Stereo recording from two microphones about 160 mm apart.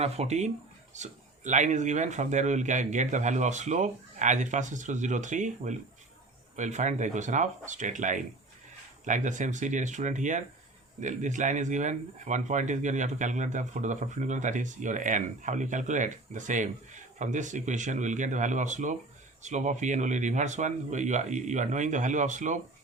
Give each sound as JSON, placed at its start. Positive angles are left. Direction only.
{"t": 0.0, "sound": "speech", "side_deg": -40}